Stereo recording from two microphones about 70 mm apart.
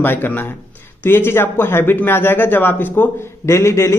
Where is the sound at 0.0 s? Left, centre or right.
Left.